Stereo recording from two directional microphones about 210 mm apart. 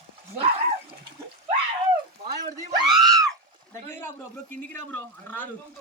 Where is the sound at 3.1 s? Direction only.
15° right (ahead or behind).